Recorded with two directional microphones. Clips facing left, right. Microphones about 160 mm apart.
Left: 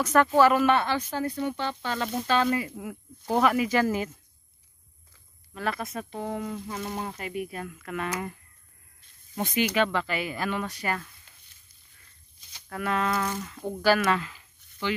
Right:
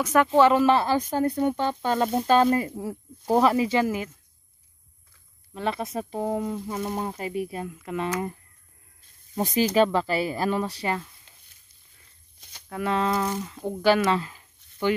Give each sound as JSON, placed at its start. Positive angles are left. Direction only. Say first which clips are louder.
{"t": 0.0, "sound": "speech", "louder": "right 1 dB", "side_deg": -15}
{"t": 0.3, "sound": "speech", "louder": "right 4 dB", "side_deg": -25}
{"t": 3.8, "sound": "speech", "louder": "even", "side_deg": -5}
{"t": 5.5, "sound": "speech", "louder": "right 3 dB", "side_deg": -25}
{"t": 7.6, "sound": "speech", "louder": "right 3 dB", "side_deg": -20}
{"t": 9.4, "sound": "speech", "louder": "right 4 dB", "side_deg": -35}
{"t": 12.6, "sound": "speech", "louder": "right 3 dB", "side_deg": -20}
{"t": 14.2, "sound": "a sound", "louder": "right 1 dB", "side_deg": -40}